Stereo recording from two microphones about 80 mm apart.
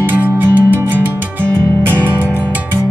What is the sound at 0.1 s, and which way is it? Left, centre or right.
Music, right.